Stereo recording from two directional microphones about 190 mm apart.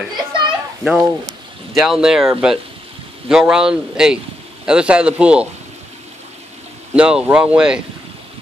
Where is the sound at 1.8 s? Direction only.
5° right (ahead or behind).